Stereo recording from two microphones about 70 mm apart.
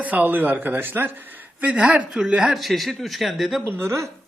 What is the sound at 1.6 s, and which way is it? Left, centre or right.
Speech, centre.